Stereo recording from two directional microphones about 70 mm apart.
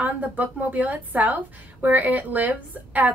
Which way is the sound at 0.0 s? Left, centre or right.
Right.